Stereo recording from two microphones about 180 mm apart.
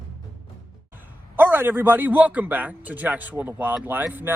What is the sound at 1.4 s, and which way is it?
A man's voice, 10° right (ahead or behind).